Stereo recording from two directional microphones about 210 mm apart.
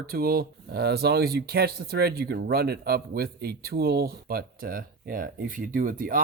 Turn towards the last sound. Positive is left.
turn(degrees=-40)  # may be behind; listen again after turning